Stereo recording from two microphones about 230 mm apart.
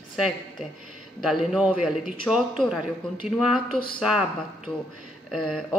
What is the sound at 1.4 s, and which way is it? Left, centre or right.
A woman's voice, centre.